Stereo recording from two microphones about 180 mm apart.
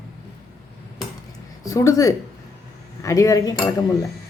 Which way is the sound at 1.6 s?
15° left (ahead or behind).